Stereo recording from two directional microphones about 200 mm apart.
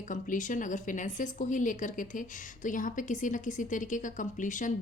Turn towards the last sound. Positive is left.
turn(degrees=40)  # may be behind; listen again after turning